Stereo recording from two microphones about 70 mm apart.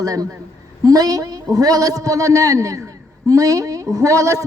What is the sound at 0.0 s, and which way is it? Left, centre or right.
A woman's voice, right.